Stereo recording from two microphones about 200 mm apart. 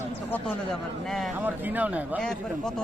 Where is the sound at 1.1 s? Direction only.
Centre (ahead or behind).